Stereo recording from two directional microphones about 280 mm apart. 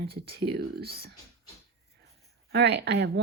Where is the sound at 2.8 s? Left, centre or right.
Right.